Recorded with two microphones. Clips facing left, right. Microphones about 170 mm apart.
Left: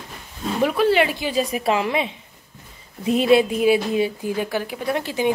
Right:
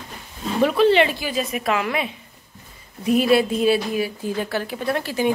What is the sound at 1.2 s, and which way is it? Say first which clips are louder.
A woman's voice: left 3 dB; 30° left (ahead or behind).